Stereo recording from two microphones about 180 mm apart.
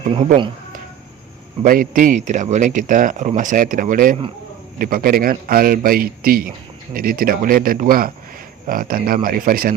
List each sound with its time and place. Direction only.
1.6 s speech: 50° right (ahead or behind)